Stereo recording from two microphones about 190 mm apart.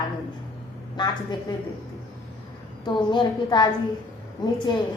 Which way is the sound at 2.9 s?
25° left (ahead or behind).